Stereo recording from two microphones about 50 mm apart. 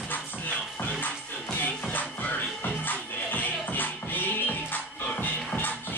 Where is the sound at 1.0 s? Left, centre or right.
Left.